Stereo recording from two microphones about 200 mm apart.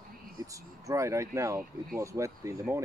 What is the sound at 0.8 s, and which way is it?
Speech, 15° right (ahead or behind).